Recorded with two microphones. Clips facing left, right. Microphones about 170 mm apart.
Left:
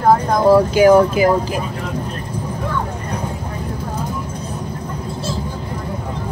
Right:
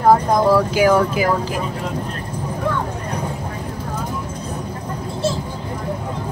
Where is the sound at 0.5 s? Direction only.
25° left (ahead or behind).